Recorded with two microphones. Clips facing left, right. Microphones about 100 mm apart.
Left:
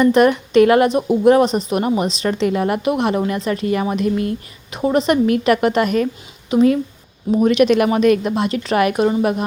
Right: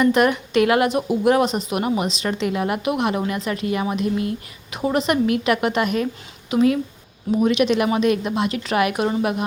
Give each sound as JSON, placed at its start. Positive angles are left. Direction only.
{"t": 0.0, "sound": "speech", "side_deg": 35}
{"t": 4.7, "sound": "speech", "side_deg": 30}
{"t": 6.5, "sound": "speech", "side_deg": 35}
{"t": 7.4, "sound": "speech", "side_deg": 45}